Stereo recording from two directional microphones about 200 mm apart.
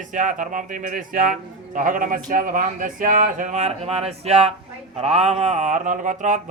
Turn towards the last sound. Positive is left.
turn(degrees=-40)  # may be behind; listen again after turning